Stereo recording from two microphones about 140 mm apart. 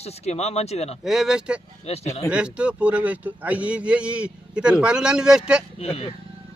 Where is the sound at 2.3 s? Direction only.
5° right (ahead or behind).